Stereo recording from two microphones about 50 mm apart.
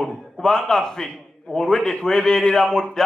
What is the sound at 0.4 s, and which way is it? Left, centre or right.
A man's voice, centre.